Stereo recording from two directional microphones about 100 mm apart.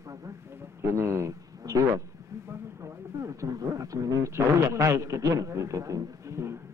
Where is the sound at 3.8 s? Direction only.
30° right (ahead or behind).